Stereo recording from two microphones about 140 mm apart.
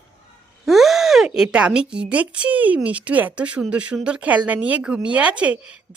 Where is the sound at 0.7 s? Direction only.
Centre (ahead or behind).